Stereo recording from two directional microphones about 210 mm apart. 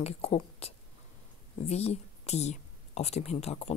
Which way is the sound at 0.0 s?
30° left (ahead or behind).